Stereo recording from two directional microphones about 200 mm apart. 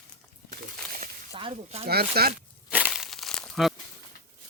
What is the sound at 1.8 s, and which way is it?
Speech, 50° right (ahead or behind).